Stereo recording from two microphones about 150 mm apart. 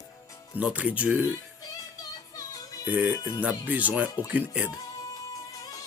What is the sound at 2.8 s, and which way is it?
Speech, 10° right (ahead or behind).